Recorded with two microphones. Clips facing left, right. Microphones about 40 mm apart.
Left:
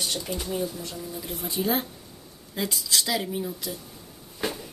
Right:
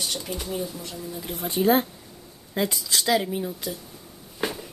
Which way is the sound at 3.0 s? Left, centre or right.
Centre.